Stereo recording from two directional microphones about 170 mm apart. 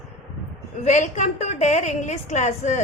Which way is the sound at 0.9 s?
45° left (ahead or behind).